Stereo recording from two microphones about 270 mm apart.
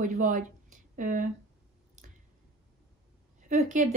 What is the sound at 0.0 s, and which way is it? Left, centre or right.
Speech, right.